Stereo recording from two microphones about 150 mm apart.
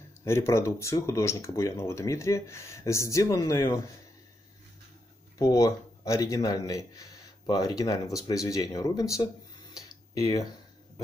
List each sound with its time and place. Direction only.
0.2 s a man's voice: 20° left (ahead or behind)
5.4 s a man's voice: 20° left (ahead or behind)
9.8 s tick-tock: 25° left (ahead or behind)